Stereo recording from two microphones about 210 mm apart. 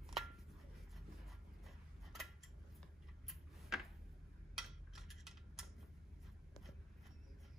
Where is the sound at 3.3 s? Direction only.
Centre (ahead or behind).